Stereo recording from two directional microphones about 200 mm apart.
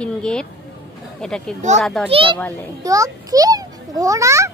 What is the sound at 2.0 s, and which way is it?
Speech, 25° right (ahead or behind).